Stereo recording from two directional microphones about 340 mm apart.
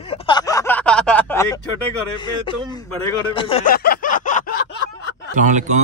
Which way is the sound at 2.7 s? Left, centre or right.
Centre.